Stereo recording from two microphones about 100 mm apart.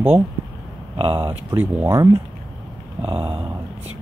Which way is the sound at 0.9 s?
65° right (ahead or behind).